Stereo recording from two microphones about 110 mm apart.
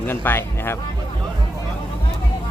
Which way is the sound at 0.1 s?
20° left (ahead or behind).